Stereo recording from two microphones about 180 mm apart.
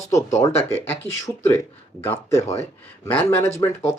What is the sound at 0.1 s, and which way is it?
Speech, 20° left (ahead or behind).